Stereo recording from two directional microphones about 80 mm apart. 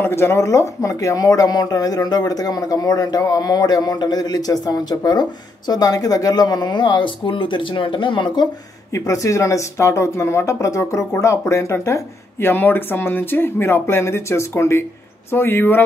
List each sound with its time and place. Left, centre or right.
0.0 s speech: left
8.9 s speech: left